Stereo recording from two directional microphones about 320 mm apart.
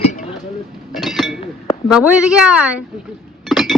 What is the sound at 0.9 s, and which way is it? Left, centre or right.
Chink, centre.